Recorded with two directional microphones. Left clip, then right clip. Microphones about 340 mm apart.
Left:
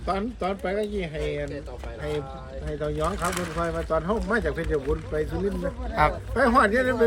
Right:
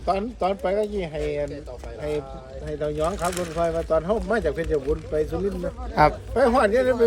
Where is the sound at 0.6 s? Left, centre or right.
Centre.